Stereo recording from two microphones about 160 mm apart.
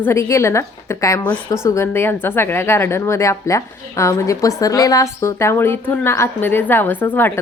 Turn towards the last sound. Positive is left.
turn(degrees=15)  # may be behind; listen again after turning